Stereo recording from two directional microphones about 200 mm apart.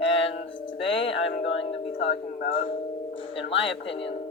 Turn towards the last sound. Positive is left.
turn(degrees=25)  # may be behind; listen again after turning